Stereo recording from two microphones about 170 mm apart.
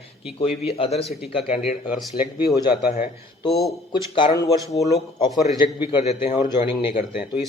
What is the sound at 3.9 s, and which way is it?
Speech, 25° left (ahead or behind).